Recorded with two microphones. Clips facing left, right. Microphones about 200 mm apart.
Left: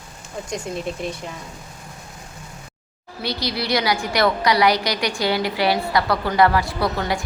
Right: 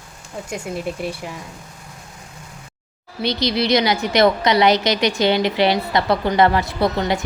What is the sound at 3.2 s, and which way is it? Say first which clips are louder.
A woman's voice: right 6 dB; 20° right (ahead or behind).